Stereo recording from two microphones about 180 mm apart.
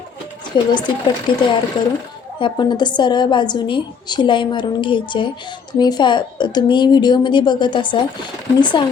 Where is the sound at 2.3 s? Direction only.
25° left (ahead or behind).